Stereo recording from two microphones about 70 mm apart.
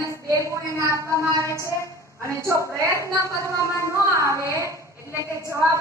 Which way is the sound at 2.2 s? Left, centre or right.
Right.